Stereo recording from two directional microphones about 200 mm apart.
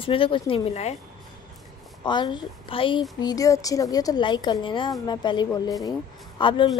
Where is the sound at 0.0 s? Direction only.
25° left (ahead or behind).